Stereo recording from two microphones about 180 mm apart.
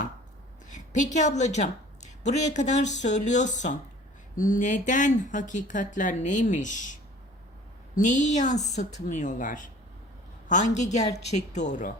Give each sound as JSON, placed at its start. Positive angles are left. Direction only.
{"t": 0.7, "sound": "a woman's voice", "side_deg": 40}
{"t": 7.9, "sound": "a woman's voice", "side_deg": 45}